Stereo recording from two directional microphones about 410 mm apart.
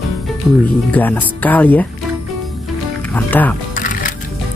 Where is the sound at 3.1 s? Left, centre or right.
Centre.